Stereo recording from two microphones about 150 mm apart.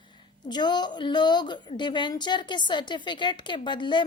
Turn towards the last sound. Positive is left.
turn(degrees=30)  # may be behind; listen again after turning